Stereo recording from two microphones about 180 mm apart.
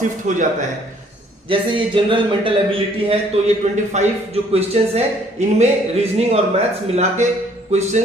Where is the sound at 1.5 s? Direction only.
25° right (ahead or behind).